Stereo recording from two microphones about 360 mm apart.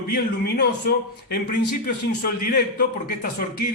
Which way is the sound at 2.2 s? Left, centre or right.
Left.